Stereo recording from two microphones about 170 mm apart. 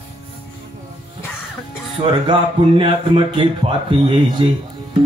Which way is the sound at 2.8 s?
30° right (ahead or behind).